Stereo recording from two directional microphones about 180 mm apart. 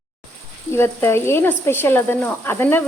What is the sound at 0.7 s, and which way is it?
Speech, 15° left (ahead or behind).